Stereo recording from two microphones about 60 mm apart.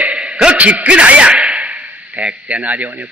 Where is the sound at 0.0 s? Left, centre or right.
Centre.